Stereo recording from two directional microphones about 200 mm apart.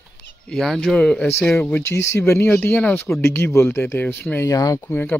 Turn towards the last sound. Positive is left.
turn(degrees=10)  # may be behind; listen again after turning